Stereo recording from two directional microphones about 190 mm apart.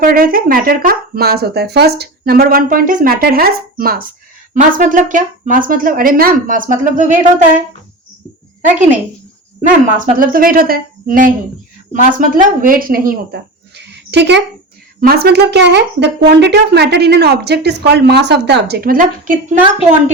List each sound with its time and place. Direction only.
0.0 s speech: 50° right (ahead or behind)
9.6 s speech: 45° right (ahead or behind)